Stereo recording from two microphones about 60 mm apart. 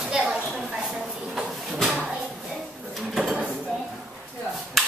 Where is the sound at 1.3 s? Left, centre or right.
Centre.